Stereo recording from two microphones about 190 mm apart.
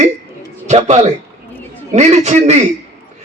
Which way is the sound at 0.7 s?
35° right (ahead or behind).